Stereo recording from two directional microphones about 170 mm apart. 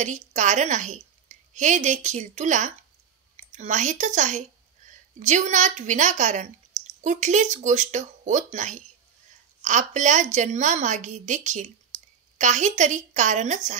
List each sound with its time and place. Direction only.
0.3 s a woman's voice: 45° right (ahead or behind)